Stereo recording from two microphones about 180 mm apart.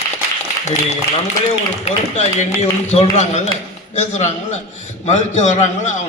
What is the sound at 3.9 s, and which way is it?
A man's voice, 40° left (ahead or behind).